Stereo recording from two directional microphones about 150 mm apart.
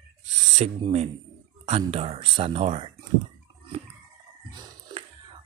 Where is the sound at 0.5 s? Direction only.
45° right (ahead or behind).